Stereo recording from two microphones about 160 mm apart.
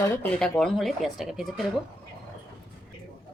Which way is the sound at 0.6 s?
Centre (ahead or behind).